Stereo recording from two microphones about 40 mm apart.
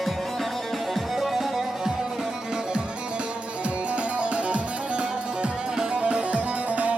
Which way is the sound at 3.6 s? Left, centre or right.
Right.